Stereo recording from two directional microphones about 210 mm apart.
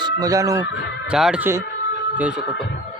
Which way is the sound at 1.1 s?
5° right (ahead or behind).